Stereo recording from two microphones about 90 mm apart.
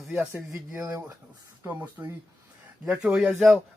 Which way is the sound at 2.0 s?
35° right (ahead or behind).